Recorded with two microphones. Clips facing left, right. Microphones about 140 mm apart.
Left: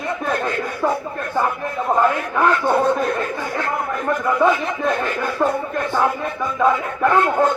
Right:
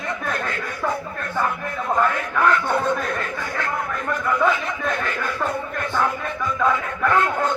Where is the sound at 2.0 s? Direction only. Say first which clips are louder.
Left 1 dB; 20° left (ahead or behind).